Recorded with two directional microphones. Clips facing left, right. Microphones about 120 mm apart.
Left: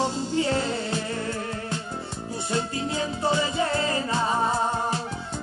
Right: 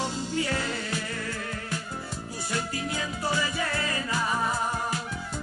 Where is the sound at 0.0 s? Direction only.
30° left (ahead or behind).